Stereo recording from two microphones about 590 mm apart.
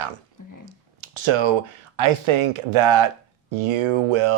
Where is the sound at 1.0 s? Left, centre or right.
Right.